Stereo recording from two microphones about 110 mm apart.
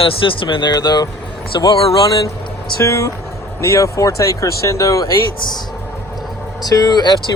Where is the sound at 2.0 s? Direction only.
35° left (ahead or behind).